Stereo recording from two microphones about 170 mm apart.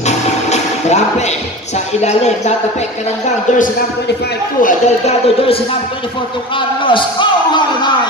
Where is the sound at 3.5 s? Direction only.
45° left (ahead or behind).